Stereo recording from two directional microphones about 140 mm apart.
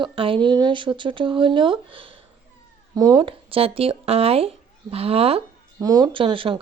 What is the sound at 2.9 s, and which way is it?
Speech, 25° right (ahead or behind).